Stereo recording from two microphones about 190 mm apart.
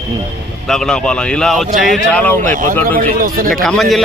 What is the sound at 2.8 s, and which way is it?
Speech, 50° right (ahead or behind).